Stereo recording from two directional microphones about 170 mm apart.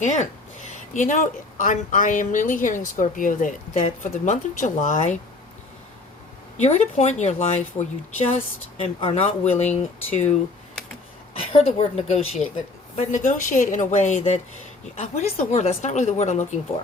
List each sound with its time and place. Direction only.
0.0 s speech: 45° left (ahead or behind)
6.6 s speech: 40° left (ahead or behind)
11.3 s speech: 35° left (ahead or behind)